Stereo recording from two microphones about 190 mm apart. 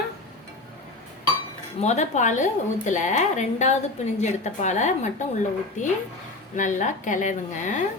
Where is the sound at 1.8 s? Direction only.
35° left (ahead or behind).